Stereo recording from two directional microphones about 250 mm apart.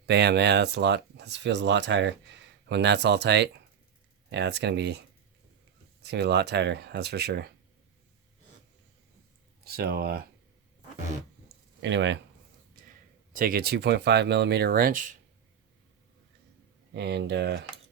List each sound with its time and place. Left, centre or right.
0.0 s speech: right
9.6 s speech: right
11.8 s speech: right
13.3 s speech: right
16.9 s speech: right